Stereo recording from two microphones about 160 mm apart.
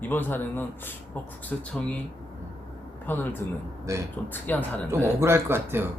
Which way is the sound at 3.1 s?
15° left (ahead or behind).